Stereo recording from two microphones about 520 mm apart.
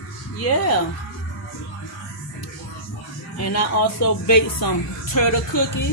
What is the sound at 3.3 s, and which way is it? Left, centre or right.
Speech, left.